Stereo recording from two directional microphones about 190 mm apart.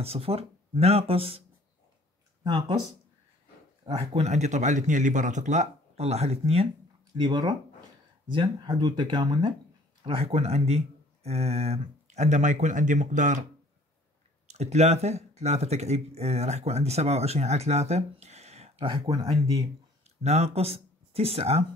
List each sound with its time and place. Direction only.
0.0 s speech: 30° right (ahead or behind)
3.8 s speech: 30° right (ahead or behind)
14.5 s speech: 35° right (ahead or behind)
20.2 s speech: 35° right (ahead or behind)